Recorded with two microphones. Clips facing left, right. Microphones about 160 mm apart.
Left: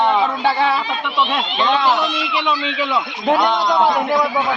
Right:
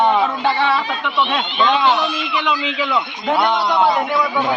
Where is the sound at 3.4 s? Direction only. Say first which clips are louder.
Right 2 dB; 15° left (ahead or behind).